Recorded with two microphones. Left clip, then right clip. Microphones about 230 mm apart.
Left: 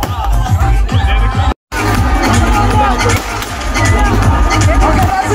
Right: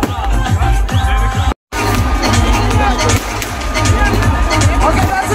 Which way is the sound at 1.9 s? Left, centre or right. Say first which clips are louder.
Left 3 dB; centre.